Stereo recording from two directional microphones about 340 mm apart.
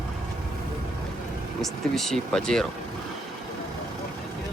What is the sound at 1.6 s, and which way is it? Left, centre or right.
Speech, centre.